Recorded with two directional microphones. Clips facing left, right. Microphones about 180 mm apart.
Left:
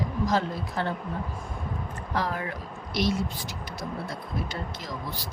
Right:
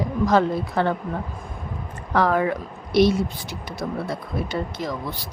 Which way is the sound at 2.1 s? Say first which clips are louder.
Right 10 dB; 65° right (ahead or behind).